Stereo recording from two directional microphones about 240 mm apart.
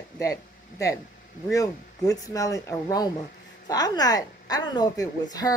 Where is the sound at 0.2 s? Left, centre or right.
Centre.